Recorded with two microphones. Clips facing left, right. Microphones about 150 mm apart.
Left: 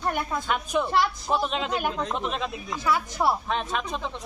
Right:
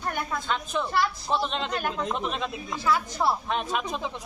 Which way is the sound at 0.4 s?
15° left (ahead or behind).